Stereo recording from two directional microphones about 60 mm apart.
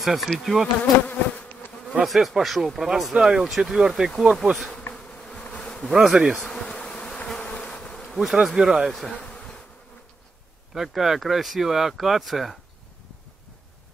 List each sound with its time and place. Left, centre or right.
0.0 s bee: centre
0.4 s speech: centre
1.0 s bee: left
2.0 s speech: centre
4.9 s bee: centre
5.9 s bee: centre
6.4 s bee: centre
7.4 s bee: left
7.7 s bee: centre
8.5 s bee: centre
9.3 s bee: left
10.7 s speech: centre